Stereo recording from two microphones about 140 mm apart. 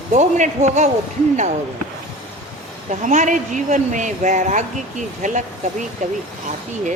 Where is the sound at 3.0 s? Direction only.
60° right (ahead or behind).